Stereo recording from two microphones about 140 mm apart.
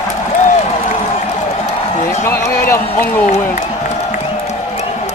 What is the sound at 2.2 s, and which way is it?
Speech, 20° left (ahead or behind).